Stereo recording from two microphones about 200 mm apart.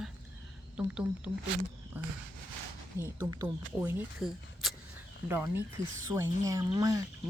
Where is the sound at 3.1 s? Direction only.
20° right (ahead or behind).